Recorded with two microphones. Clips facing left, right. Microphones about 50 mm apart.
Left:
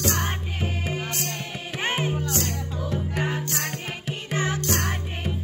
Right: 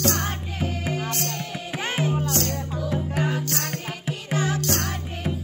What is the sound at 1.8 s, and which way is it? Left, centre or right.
Music, left.